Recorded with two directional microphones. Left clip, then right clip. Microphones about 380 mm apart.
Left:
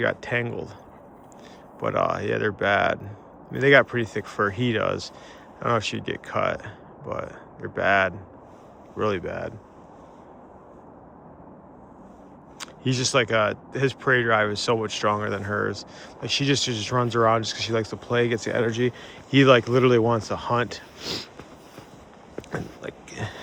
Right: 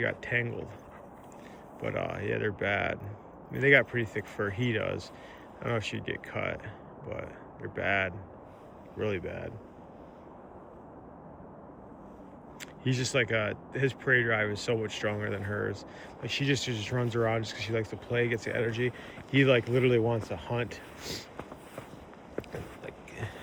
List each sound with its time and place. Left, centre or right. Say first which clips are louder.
0.0 s speech: left 6 dB; centre
1.8 s speech: left 10 dB; centre
12.5 s speech: left 6 dB; centre
22.8 s a sound: left 7 dB; centre